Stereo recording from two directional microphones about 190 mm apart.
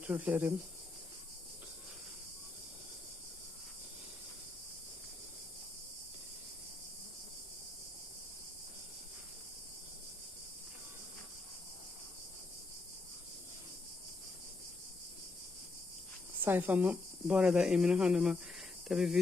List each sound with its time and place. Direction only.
0.0 s speech: 10° right (ahead or behind)
16.4 s a woman's voice: 10° right (ahead or behind)